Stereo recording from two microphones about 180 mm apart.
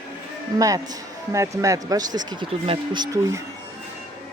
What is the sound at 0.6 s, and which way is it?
Speech, 20° right (ahead or behind).